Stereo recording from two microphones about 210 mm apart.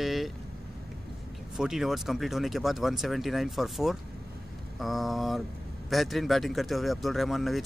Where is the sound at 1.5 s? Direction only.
Centre (ahead or behind).